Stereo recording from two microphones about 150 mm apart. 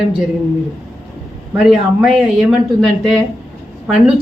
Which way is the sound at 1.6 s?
Centre (ahead or behind).